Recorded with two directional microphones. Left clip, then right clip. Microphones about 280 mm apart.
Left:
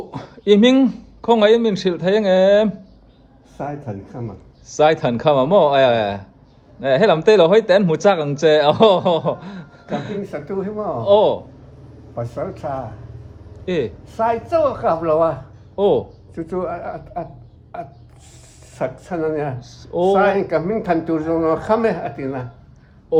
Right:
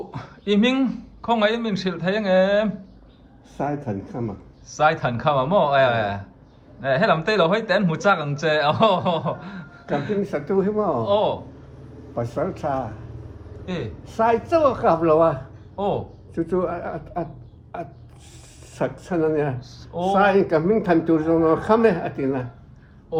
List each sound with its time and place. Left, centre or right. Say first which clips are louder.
0.1 s speech: left 10 dB; centre
3.6 s a man's voice: right 1 dB; centre
4.7 s speech: left 5 dB; left
10.2 s a man's voice: right 3 dB; centre
11.0 s speech: left 10 dB; centre
12.1 s a man's voice: even; centre
13.7 s speech: left 10 dB; left
14.0 s a man's voice: even; centre
18.8 s a man's voice: even; centre
19.5 s speech: left 2 dB; left
20.1 s a man's voice: right 2 dB; centre